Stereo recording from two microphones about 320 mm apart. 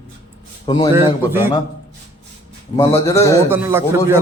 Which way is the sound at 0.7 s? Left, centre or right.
Centre.